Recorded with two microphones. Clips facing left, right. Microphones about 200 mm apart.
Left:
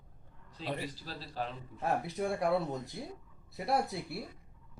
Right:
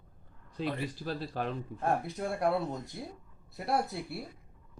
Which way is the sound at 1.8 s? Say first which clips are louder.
Even; centre (ahead or behind).